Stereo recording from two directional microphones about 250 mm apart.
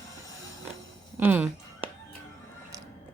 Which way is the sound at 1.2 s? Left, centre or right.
Centre.